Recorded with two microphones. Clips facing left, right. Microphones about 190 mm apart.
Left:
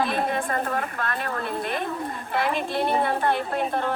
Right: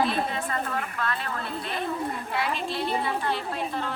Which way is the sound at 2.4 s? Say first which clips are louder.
Left 6 dB; 55° left (ahead or behind).